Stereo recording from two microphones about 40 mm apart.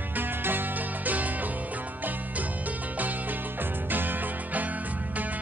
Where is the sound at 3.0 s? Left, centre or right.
Right.